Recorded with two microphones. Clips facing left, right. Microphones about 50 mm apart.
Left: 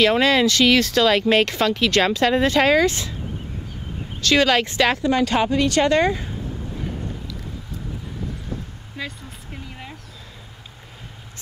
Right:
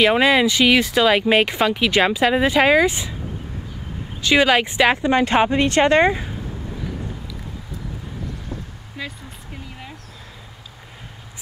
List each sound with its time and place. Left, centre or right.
0.0 s speech: centre
4.2 s a woman's voice: centre
9.0 s vehicle: centre